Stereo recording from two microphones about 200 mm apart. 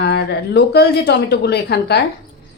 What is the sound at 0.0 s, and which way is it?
A woman's voice, 55° left (ahead or behind).